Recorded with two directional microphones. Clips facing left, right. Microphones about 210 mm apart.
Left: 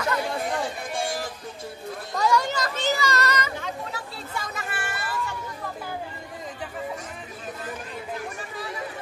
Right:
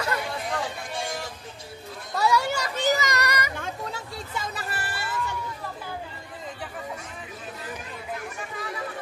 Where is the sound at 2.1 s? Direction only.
10° right (ahead or behind).